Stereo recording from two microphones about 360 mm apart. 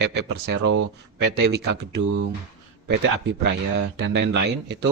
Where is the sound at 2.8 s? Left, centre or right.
Right.